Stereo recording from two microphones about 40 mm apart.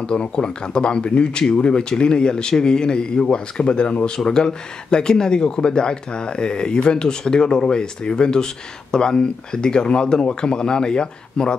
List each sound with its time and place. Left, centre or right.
0.0 s speech: left